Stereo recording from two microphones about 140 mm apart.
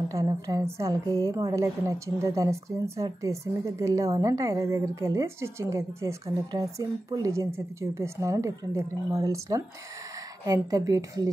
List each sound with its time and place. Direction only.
0.1 s a woman's voice: 25° right (ahead or behind)